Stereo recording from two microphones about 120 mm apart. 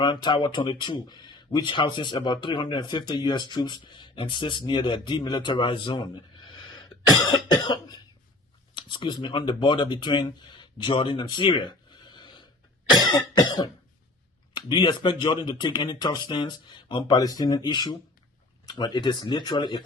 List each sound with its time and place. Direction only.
0.0 s speech: 40° left (ahead or behind)
6.5 s cough: 35° left (ahead or behind)
8.7 s speech: 45° left (ahead or behind)
12.9 s cough: 35° left (ahead or behind)
14.5 s speech: 40° left (ahead or behind)